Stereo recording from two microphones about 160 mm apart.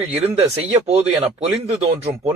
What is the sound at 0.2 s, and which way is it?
Speech, 40° right (ahead or behind).